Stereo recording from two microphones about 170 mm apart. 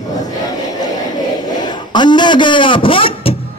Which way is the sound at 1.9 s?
25° left (ahead or behind).